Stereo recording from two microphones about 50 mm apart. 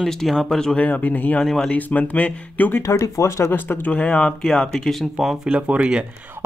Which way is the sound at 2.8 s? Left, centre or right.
Left.